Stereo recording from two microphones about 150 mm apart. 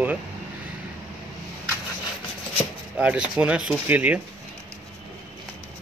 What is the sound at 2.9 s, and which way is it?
Speech, 5° right (ahead or behind).